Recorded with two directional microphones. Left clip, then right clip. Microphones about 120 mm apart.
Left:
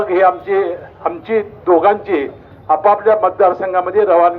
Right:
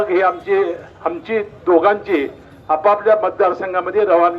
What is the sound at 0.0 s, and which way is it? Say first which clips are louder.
A man's voice: left 3 dB; 35° left (ahead or behind).